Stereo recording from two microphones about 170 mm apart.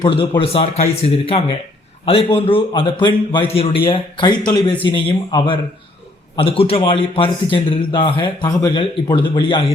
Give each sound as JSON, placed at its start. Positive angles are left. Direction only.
{"t": 0.0, "sound": "a man's voice", "side_deg": 30}